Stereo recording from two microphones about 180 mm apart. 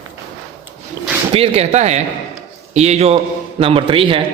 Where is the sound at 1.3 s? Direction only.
30° right (ahead or behind).